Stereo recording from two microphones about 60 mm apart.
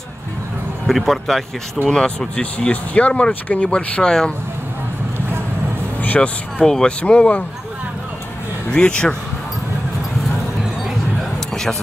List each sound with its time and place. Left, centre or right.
0.8 s speech: centre
1.9 s speech: centre
5.9 s a sound: left
6.6 s speech: centre
7.0 s speech: centre
8.7 s speech: centre